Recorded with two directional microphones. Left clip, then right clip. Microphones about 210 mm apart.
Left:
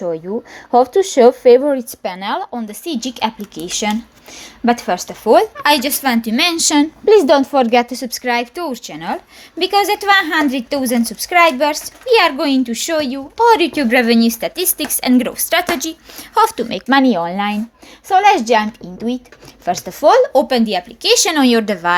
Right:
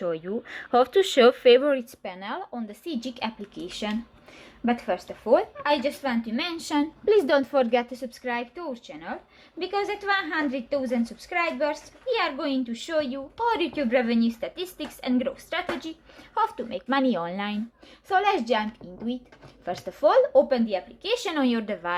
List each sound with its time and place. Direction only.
0.0 s speech: 5° left (ahead or behind)
2.0 s speech: 25° left (ahead or behind)
7.0 s a woman's voice: 20° left (ahead or behind); by 17.0 s 40° left (ahead or behind)
17.0 s speech: 20° left (ahead or behind); by 21.9 s 40° left (ahead or behind)